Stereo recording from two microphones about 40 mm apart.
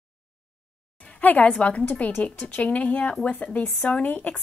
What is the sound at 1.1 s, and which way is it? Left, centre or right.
A woman's voice, left.